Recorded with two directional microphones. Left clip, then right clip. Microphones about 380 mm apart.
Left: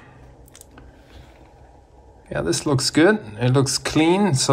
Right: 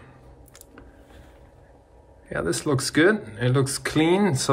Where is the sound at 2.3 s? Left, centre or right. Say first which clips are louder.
Left 3 dB; centre.